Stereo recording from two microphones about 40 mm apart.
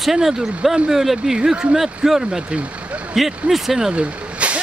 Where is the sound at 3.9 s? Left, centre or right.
Right.